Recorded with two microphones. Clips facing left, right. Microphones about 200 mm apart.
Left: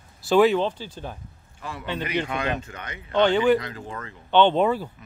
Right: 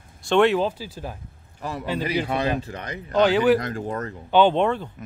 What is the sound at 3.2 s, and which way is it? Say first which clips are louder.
Speech: right 1 dB; 5° right (ahead or behind).